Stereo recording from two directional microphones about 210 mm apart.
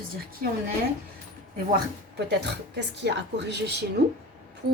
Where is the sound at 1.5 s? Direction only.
45° right (ahead or behind).